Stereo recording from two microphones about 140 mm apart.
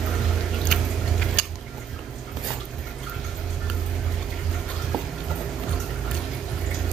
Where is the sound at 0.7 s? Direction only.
5° left (ahead or behind).